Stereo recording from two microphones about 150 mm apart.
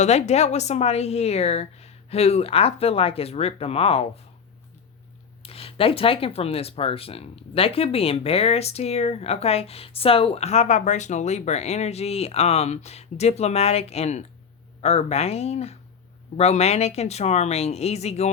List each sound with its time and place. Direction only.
0.0 s speech: 50° left (ahead or behind)
5.4 s speech: 40° left (ahead or behind)